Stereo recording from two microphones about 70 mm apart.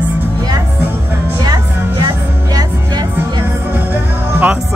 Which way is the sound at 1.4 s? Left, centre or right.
Right.